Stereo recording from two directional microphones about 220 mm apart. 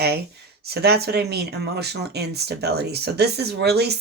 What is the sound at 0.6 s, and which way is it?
Speech, 45° right (ahead or behind).